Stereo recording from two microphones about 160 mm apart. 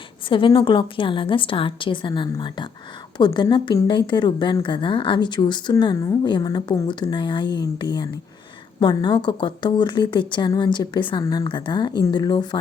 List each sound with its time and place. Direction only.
0.3 s a woman's voice: 30° left (ahead or behind)